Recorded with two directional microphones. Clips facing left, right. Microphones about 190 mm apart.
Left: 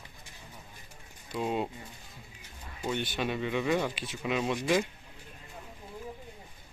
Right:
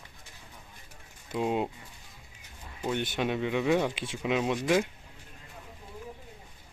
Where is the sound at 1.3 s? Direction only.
15° right (ahead or behind).